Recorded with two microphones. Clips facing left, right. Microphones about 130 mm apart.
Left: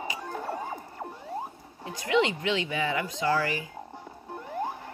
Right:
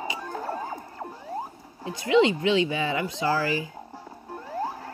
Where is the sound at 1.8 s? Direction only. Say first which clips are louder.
Right 5 dB; 25° right (ahead or behind).